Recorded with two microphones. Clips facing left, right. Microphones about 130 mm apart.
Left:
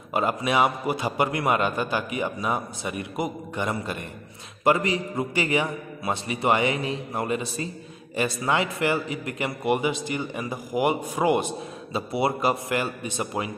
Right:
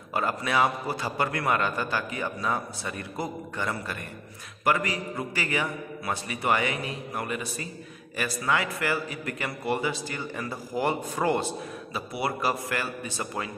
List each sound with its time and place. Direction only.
0.1 s a man's voice: 20° left (ahead or behind)